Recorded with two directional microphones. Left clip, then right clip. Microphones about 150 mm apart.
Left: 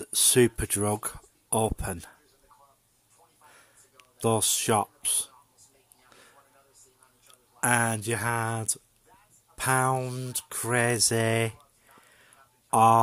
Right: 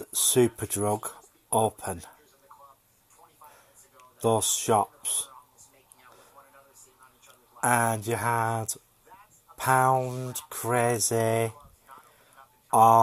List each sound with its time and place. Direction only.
0.0 s speech: 45° left (ahead or behind)
3.5 s a sound: 40° left (ahead or behind)
7.6 s speech: 40° left (ahead or behind)
12.6 s speech: 40° left (ahead or behind)